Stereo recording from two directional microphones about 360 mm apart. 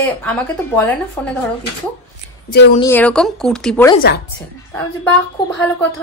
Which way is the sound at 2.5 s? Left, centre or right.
Left.